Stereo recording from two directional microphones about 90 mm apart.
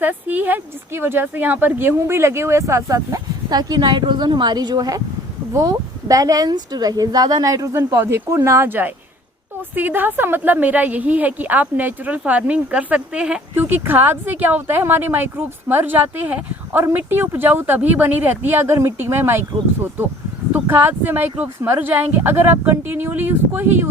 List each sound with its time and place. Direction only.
0.0 s a woman's voice: 20° right (ahead or behind)
13.5 s a woman's voice: 25° right (ahead or behind)